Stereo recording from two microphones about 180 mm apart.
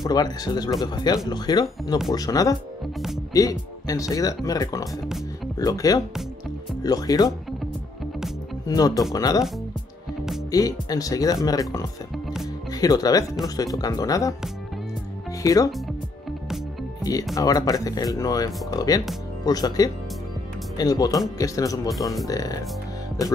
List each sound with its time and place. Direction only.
0.0 s speech: 20° left (ahead or behind)
8.6 s speech: 20° left (ahead or behind)
10.5 s speech: 20° left (ahead or behind)
15.4 s speech: 20° left (ahead or behind)
17.0 s speech: 20° left (ahead or behind)